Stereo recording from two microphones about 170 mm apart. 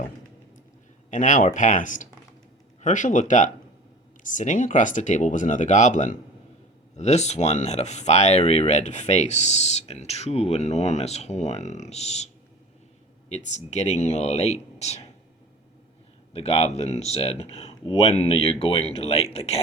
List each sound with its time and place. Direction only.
1.1 s speech: 50° left (ahead or behind)
16.3 s speech: 35° left (ahead or behind)